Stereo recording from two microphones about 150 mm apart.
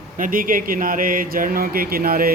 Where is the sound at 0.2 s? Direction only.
65° right (ahead or behind).